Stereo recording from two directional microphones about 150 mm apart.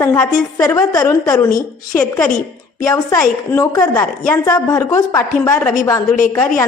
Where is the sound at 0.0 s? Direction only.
20° left (ahead or behind).